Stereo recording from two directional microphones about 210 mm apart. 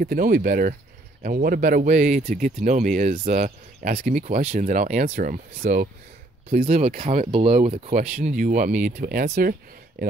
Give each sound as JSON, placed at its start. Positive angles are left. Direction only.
{"t": 0.0, "sound": "speech", "side_deg": -45}
{"t": 6.5, "sound": "speech", "side_deg": -30}